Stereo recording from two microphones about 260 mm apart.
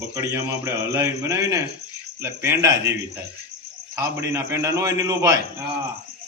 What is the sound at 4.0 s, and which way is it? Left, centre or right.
Speech, centre.